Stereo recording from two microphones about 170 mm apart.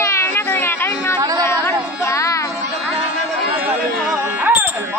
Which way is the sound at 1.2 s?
20° right (ahead or behind).